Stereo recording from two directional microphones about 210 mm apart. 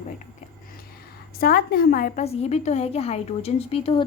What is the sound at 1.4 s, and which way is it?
A woman's voice, 45° left (ahead or behind).